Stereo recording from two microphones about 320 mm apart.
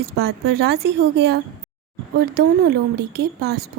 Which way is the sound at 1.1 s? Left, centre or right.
Right.